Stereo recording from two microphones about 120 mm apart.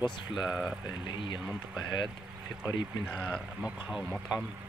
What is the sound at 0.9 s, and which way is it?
Speech, 40° left (ahead or behind).